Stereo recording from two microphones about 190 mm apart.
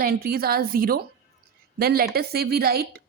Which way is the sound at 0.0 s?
50° right (ahead or behind).